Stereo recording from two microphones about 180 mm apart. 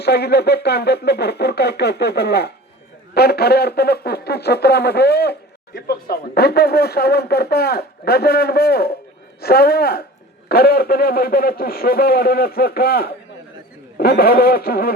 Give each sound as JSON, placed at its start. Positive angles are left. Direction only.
{"t": 0.0, "sound": "speech", "side_deg": 65}